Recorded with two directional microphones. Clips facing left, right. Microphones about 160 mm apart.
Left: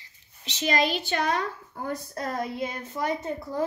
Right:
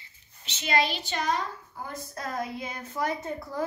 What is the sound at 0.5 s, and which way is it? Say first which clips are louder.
Speech: left 2 dB; 40° left (ahead or behind).